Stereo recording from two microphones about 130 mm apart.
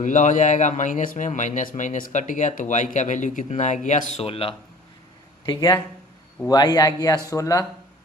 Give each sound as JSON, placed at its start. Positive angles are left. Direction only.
{"t": 0.0, "sound": "speech", "side_deg": 70}
{"t": 4.3, "sound": "speech", "side_deg": 45}
{"t": 5.5, "sound": "a man's voice", "side_deg": 30}